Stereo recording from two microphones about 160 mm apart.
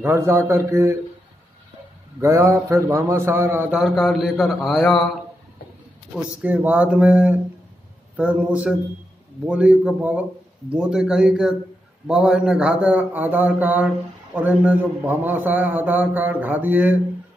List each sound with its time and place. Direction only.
0.0 s a man's voice: 15° right (ahead or behind)
2.2 s a man's voice: 15° right (ahead or behind)
3.8 s a man's voice: centre (ahead or behind)
6.4 s a man's voice: 10° right (ahead or behind)